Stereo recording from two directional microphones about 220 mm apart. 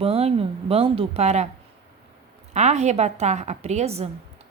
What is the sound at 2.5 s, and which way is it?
A woman's voice, 30° right (ahead or behind).